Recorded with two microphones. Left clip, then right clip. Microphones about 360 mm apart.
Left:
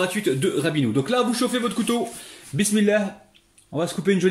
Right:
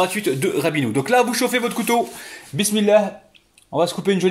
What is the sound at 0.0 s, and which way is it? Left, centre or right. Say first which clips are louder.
Speech: right 3 dB; centre.